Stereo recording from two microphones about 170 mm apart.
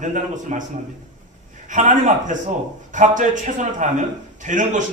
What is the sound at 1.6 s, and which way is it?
A man's voice, 45° right (ahead or behind).